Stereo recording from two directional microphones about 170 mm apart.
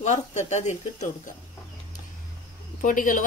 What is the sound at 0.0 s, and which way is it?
A woman's voice, 40° left (ahead or behind).